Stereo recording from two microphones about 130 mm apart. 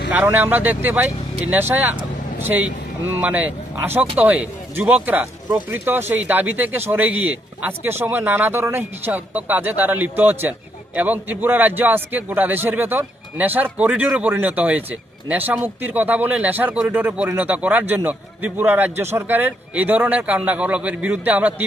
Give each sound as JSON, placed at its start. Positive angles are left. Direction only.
{"t": 0.1, "sound": "speech", "side_deg": -15}